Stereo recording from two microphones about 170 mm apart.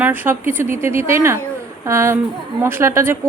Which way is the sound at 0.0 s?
10° right (ahead or behind).